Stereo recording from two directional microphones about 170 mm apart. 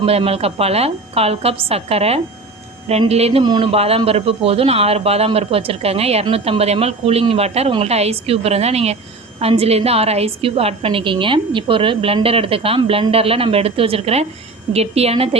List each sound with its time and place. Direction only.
0.0 s a man's voice: 35° right (ahead or behind)